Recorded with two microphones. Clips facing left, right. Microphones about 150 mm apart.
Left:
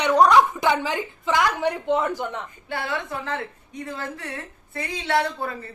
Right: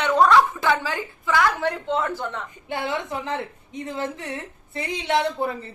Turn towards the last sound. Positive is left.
turn(degrees=-20)  # may be behind; listen again after turning